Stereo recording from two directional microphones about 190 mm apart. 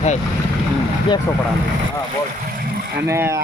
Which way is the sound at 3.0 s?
15° right (ahead or behind).